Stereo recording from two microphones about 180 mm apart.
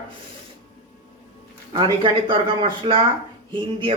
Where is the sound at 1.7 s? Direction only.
25° right (ahead or behind).